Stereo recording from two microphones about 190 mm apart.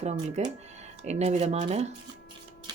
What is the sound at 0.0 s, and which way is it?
Speech, 35° right (ahead or behind).